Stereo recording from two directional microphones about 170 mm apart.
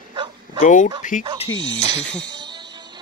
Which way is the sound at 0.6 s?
50° left (ahead or behind).